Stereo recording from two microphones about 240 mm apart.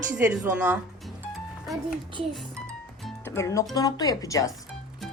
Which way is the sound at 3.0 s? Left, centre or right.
Centre.